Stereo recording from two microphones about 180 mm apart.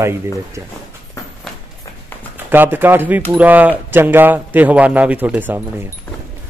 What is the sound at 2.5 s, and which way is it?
Speech, 10° right (ahead or behind).